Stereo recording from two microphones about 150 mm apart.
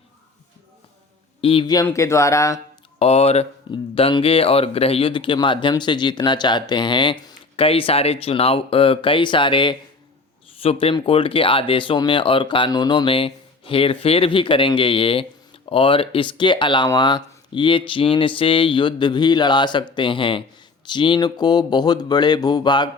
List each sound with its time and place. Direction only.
1.4 s a man's voice: 40° left (ahead or behind)
1.7 s speech: 20° left (ahead or behind)
3.0 s speech: 45° left (ahead or behind)